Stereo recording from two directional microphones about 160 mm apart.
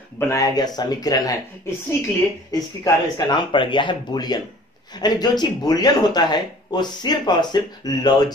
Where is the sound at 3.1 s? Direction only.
30° left (ahead or behind).